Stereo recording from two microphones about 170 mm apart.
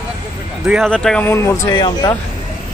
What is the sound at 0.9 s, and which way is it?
Speech, 5° left (ahead or behind).